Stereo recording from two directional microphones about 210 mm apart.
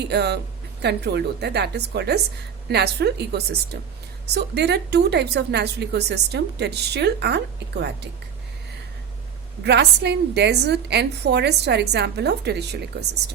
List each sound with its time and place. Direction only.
0.1 s a woman's voice: 55° right (ahead or behind)
9.6 s a woman's voice: 55° right (ahead or behind)